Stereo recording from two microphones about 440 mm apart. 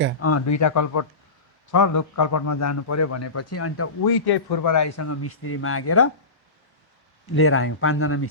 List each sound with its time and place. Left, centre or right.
0.2 s a man's voice: left
4.0 s a man's voice: left
4.7 s a man's voice: left
7.3 s speech: left